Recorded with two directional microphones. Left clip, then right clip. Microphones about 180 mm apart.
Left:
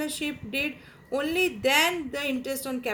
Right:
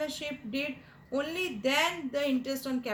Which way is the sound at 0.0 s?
35° left (ahead or behind).